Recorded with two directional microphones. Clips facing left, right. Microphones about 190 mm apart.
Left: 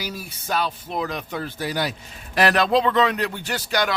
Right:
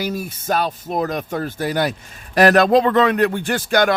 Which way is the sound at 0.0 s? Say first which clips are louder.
Right 8 dB; 50° right (ahead or behind).